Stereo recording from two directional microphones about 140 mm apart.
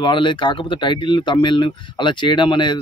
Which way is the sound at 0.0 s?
35° left (ahead or behind).